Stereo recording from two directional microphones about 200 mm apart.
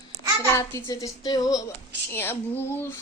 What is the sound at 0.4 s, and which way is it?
A child's voice, 15° left (ahead or behind).